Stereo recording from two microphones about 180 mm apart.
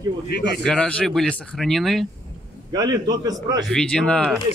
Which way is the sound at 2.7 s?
20° right (ahead or behind).